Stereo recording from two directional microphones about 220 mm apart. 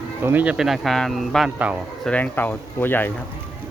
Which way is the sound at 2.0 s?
5° left (ahead or behind).